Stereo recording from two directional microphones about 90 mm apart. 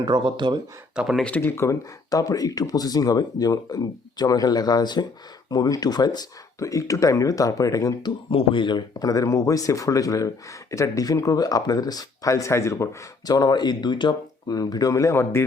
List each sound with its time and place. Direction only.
0.0 s speech: 55° right (ahead or behind)
0.9 s speech: 5° right (ahead or behind)
1.2 s speech: 20° left (ahead or behind)
2.0 s speech: 40° left (ahead or behind)
8.3 s speech: 75° left (ahead or behind); by 13.0 s 35° left (ahead or behind)
13.2 s speech: 45° left (ahead or behind); by 15.4 s 30° left (ahead or behind)